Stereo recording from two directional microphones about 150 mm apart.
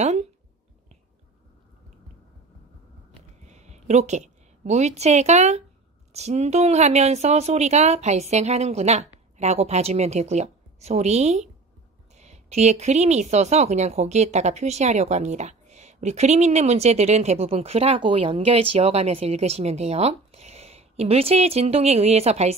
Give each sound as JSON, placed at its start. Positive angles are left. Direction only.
{"t": 0.0, "sound": "speech", "side_deg": -50}
{"t": 3.4, "sound": "a woman's voice", "side_deg": -50}